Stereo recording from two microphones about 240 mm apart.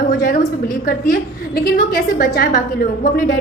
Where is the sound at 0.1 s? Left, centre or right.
Left.